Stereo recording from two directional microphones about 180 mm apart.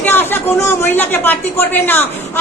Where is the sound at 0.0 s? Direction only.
10° left (ahead or behind).